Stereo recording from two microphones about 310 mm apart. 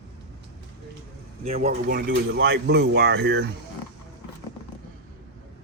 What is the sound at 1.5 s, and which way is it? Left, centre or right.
Speech, centre.